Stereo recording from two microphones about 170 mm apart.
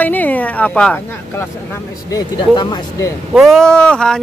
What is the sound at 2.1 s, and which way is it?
Speech, 25° left (ahead or behind).